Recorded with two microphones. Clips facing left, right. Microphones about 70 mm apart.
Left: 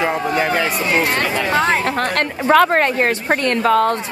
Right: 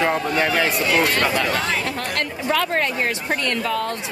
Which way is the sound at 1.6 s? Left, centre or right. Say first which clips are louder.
Left 7 dB; left.